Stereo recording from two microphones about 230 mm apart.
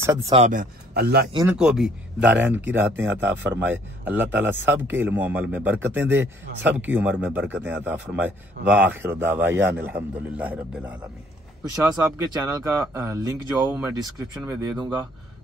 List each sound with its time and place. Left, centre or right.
0.3 s speech: right
1.3 s a man's voice: centre
1.6 s a man's voice: centre